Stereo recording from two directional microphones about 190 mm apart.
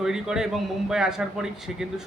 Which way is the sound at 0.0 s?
5° right (ahead or behind).